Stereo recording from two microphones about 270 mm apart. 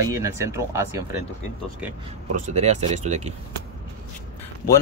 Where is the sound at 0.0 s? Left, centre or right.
Centre.